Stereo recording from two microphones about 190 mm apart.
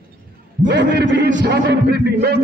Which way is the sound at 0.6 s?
70° right (ahead or behind).